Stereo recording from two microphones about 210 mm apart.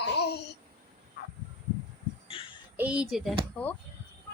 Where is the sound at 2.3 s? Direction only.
25° left (ahead or behind).